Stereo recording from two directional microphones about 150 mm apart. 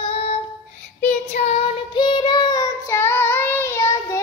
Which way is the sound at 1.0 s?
50° left (ahead or behind).